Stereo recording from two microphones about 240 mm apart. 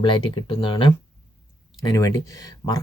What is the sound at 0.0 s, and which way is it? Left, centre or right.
Speech, centre.